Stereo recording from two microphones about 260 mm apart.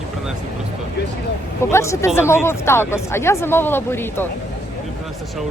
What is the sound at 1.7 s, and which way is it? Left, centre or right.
Speech, centre.